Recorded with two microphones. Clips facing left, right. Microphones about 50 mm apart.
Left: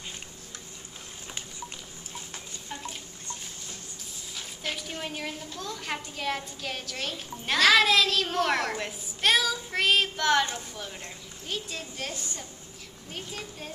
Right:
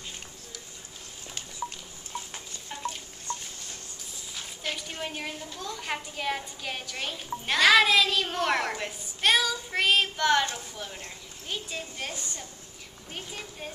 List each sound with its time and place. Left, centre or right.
1.6 s a sound: right
2.3 s stir: centre
4.4 s a woman's voice: centre